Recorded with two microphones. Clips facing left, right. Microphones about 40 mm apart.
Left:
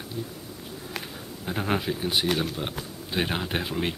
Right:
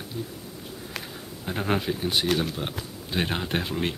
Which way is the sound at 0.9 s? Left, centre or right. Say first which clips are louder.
Left 1 dB; centre.